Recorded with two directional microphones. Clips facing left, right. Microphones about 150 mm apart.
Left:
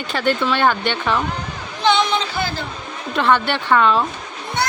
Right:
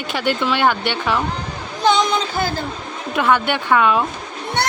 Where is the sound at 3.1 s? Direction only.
10° right (ahead or behind).